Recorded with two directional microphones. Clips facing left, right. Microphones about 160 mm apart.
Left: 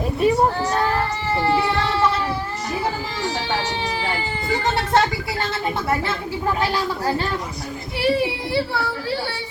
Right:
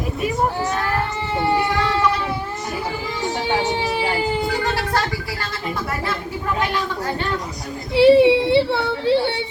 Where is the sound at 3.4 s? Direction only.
10° right (ahead or behind).